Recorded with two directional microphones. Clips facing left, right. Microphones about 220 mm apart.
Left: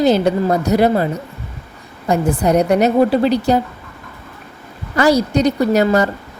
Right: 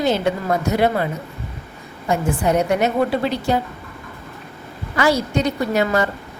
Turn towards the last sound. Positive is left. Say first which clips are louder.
# left 5 dB
turn(degrees=40)  # may be behind; listen again after turning